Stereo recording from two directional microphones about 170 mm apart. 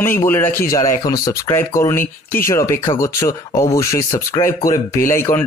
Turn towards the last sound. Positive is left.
turn(degrees=15)  # may be behind; listen again after turning